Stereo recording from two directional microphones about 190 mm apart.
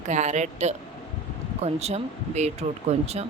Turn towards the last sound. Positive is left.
turn(degrees=-35)  # may be behind; listen again after turning